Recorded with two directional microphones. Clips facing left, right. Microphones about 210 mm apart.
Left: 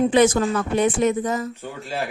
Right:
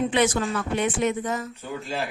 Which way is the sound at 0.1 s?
40° left (ahead or behind).